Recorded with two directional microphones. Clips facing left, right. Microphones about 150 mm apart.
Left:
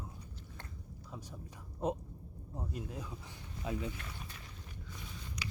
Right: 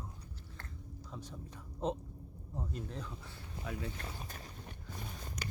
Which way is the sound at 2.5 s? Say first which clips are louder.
Even; 10° left (ahead or behind).